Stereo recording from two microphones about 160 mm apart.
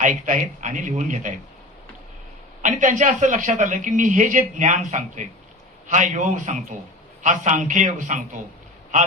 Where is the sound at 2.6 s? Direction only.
55° right (ahead or behind).